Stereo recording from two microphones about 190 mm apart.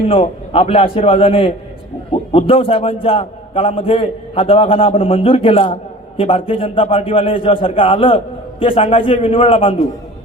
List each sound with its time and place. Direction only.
0.1 s a man's voice: 30° left (ahead or behind)